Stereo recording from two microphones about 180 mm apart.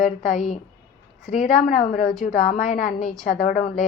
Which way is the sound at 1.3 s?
45° left (ahead or behind).